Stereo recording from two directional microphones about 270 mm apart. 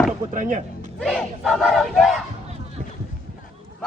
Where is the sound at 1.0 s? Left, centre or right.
Centre.